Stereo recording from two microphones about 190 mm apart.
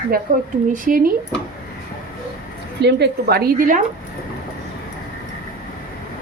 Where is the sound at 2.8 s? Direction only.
60° right (ahead or behind).